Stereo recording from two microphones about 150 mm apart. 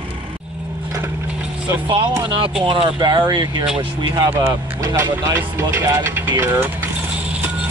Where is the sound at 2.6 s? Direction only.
35° right (ahead or behind); by 6.7 s 15° right (ahead or behind).